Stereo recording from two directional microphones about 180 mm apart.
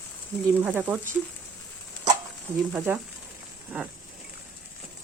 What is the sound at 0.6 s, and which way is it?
Speech, 10° right (ahead or behind).